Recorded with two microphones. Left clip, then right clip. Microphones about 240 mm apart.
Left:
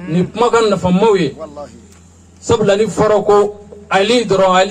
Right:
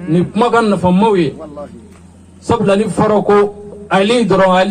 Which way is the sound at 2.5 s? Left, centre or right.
Left.